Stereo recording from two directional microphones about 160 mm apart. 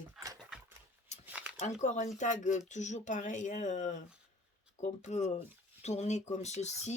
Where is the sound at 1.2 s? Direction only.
10° right (ahead or behind).